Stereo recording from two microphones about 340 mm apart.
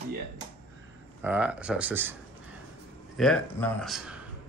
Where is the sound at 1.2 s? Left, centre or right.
Centre.